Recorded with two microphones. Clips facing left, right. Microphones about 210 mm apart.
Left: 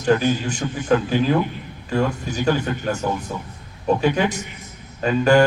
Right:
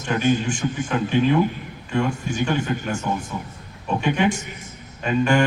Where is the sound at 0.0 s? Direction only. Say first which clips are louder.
Left 2 dB; 40° left (ahead or behind).